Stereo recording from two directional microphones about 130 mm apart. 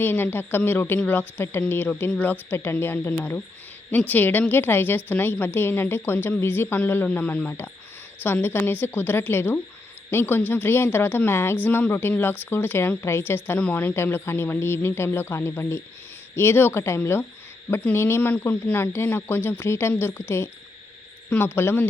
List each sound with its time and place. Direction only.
0.0 s a woman's voice: 15° left (ahead or behind)